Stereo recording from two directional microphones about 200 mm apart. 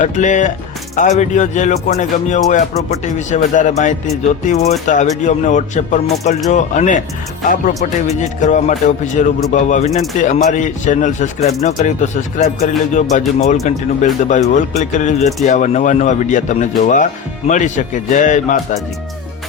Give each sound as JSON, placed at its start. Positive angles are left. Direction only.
{"t": 0.0, "sound": "speech", "side_deg": 40}
{"t": 8.0, "sound": "speech", "side_deg": 35}